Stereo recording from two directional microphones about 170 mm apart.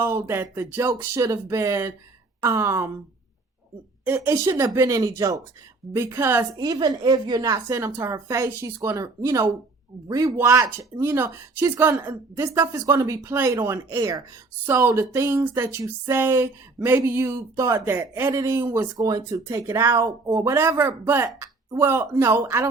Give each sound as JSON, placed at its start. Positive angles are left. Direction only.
{"t": 0.0, "sound": "speech", "side_deg": -15}
{"t": 4.0, "sound": "speech", "side_deg": -10}